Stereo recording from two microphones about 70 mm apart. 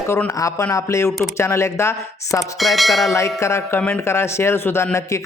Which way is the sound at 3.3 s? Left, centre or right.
Left.